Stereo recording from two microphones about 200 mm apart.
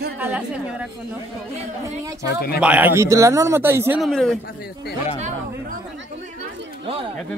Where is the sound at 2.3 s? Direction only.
50° left (ahead or behind).